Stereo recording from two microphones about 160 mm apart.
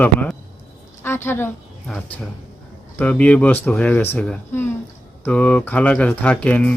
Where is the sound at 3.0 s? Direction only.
10° left (ahead or behind).